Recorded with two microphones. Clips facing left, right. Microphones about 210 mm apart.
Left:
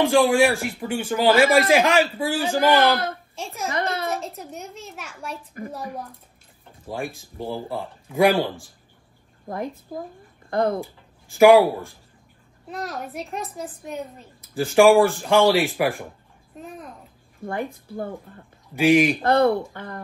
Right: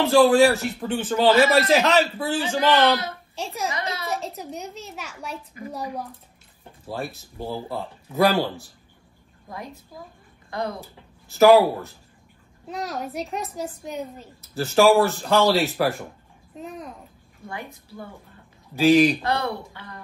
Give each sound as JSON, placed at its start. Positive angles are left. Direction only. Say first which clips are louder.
{"t": 0.0, "sound": "speech", "louder": "right 2 dB", "side_deg": 10}
{"t": 3.3, "sound": "a woman's voice", "louder": "right 5 dB", "side_deg": 0}
{"t": 3.7, "sound": "a sound", "louder": "left 5 dB", "side_deg": 50}
{"t": 4.1, "sound": "a woman's voice", "louder": "even", "side_deg": 0}
{"t": 7.3, "sound": "speech", "louder": "left 1 dB", "side_deg": 15}
{"t": 9.5, "sound": "speech", "louder": "left 8 dB", "side_deg": 50}
{"t": 10.8, "sound": "speech", "louder": "left 8 dB", "side_deg": 10}
{"t": 12.6, "sound": "a woman's voice", "louder": "right 1 dB", "side_deg": 0}
{"t": 14.4, "sound": "speech", "louder": "left 2 dB", "side_deg": 15}
{"t": 17.5, "sound": "speech", "louder": "left 8 dB", "side_deg": 50}
{"t": 18.8, "sound": "speech", "louder": "right 1 dB", "side_deg": 10}
{"t": 19.2, "sound": "speech", "louder": "left 8 dB", "side_deg": 50}